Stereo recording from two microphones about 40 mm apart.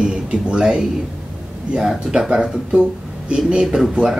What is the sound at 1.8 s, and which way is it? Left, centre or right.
Speech, centre.